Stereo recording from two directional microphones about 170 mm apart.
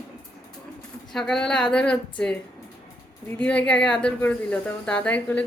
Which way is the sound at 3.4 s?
10° left (ahead or behind).